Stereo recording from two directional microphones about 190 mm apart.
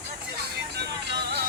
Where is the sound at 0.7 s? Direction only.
60° right (ahead or behind).